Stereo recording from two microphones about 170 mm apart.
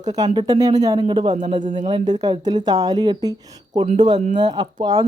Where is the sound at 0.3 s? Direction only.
25° right (ahead or behind).